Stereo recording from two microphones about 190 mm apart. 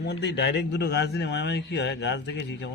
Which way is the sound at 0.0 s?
65° left (ahead or behind).